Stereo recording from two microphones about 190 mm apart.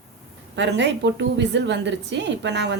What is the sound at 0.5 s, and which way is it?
A woman's voice, 70° right (ahead or behind).